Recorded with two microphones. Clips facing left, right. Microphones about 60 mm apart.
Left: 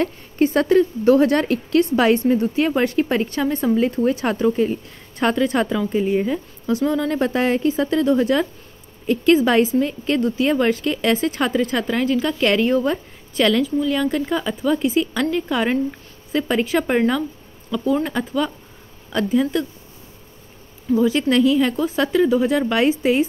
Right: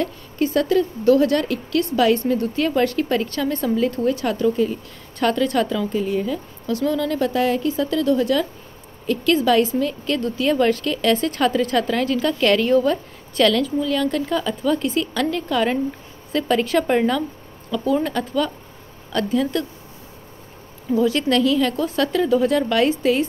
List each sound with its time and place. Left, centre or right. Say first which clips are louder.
0.0 s a woman's voice: left 3 dB; left; by 19.6 s centre
20.9 s speech: left 1 dB; centre